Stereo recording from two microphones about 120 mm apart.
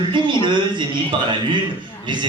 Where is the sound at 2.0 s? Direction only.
40° right (ahead or behind).